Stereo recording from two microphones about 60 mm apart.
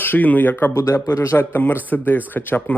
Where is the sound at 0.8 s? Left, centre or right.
Left.